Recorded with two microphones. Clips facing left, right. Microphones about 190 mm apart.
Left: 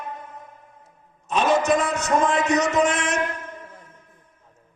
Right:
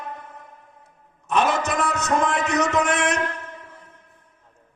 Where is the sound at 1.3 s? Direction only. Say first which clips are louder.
Left 2 dB; 60° right (ahead or behind).